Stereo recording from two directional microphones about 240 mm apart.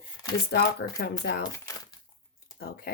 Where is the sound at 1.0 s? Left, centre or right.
Left.